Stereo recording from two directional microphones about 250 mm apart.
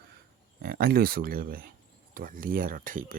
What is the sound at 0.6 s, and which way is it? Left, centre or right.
Speech, right.